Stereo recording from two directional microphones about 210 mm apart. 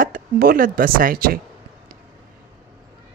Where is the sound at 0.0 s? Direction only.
45° right (ahead or behind).